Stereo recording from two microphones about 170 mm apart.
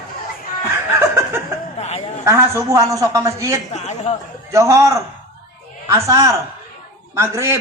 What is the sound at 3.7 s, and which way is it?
Speech, 40° left (ahead or behind).